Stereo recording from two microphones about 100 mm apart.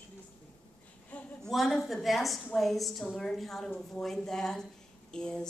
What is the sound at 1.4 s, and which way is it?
A woman's voice, centre (ahead or behind).